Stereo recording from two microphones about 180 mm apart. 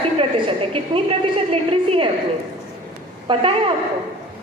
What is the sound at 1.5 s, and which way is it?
Speech, 30° right (ahead or behind).